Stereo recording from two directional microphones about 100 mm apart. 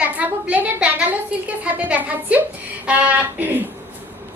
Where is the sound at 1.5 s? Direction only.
15° right (ahead or behind).